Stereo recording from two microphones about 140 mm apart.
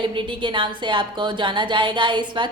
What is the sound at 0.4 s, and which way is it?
A woman's voice, 35° right (ahead or behind).